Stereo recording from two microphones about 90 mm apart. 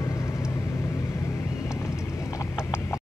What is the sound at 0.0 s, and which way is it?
Vehicle, 35° left (ahead or behind).